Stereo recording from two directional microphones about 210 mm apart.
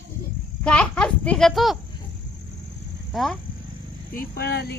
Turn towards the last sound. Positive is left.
turn(degrees=50)  # may be behind; listen again after turning